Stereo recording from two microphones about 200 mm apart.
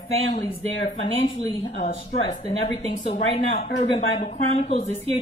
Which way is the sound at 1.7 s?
30° left (ahead or behind).